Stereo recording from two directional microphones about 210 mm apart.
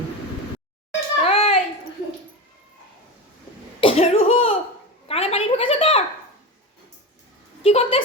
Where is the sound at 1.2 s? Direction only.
30° left (ahead or behind).